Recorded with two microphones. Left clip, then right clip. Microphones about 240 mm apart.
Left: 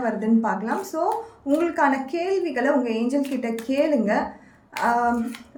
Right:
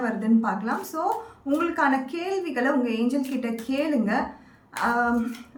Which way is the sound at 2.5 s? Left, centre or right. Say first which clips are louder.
Even; centre.